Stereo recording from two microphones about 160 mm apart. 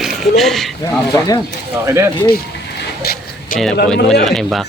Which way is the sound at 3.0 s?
75° left (ahead or behind).